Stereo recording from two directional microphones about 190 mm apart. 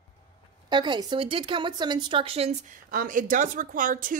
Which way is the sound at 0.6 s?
25° right (ahead or behind).